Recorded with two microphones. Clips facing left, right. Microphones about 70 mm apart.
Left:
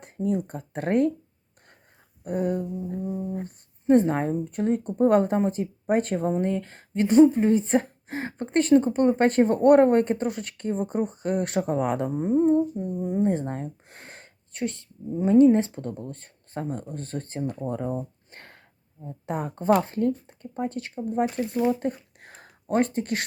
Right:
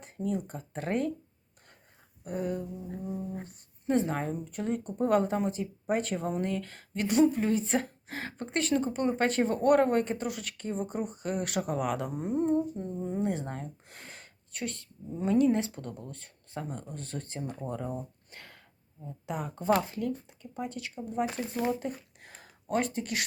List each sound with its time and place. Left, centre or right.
0.0 s speech: left
2.2 s a sound: left
3.4 s speech: left
6.3 s a woman's voice: left
8.7 s speech: left
12.7 s speech: centre; by 21.4 s left
21.8 s a sound: left